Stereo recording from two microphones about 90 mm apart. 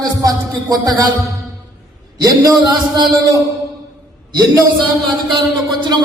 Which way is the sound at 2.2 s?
45° right (ahead or behind).